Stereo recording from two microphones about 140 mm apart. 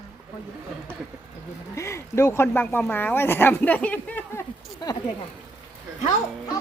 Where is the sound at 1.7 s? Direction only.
20° left (ahead or behind).